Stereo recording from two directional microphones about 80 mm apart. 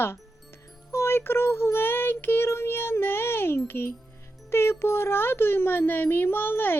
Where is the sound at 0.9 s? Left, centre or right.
Left.